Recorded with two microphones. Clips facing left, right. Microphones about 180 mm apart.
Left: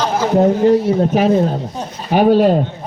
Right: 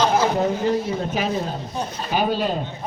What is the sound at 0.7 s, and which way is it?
Speech, 65° left (ahead or behind).